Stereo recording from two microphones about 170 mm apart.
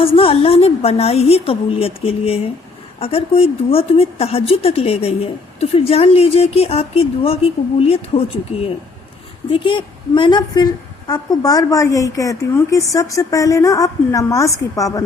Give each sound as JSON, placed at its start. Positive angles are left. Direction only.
{"t": 0.0, "sound": "speech", "side_deg": 35}
{"t": 9.5, "sound": "a woman's voice", "side_deg": 30}